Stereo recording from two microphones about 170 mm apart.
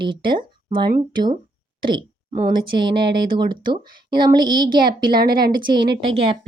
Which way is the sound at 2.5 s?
25° right (ahead or behind).